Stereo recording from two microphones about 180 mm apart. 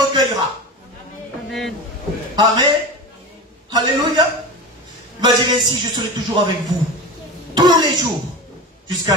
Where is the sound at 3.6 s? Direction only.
20° right (ahead or behind).